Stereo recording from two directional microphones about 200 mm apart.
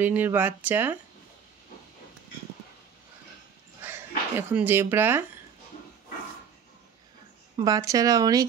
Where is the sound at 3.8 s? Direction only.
10° right (ahead or behind).